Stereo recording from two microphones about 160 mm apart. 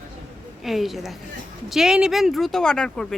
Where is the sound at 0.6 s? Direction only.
Centre (ahead or behind).